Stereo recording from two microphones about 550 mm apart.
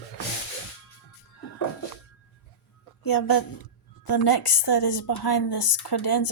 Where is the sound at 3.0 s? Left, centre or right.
Left.